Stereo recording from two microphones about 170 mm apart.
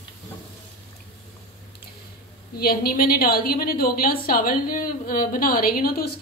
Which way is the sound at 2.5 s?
60° left (ahead or behind).